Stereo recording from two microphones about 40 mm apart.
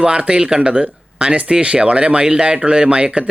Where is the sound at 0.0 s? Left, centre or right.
Right.